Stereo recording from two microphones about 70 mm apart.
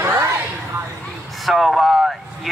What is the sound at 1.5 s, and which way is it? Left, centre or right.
Speech, centre.